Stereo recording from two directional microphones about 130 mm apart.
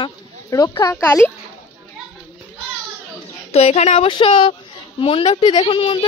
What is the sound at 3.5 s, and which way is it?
Speech, 55° left (ahead or behind).